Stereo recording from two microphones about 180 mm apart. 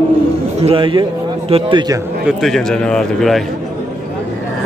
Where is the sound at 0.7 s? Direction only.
30° right (ahead or behind).